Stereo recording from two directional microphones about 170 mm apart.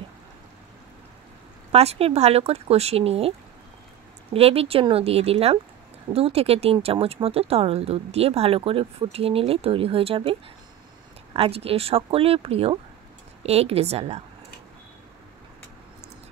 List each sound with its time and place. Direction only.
1.7 s speech: 35° right (ahead or behind)
11.3 s speech: 35° right (ahead or behind)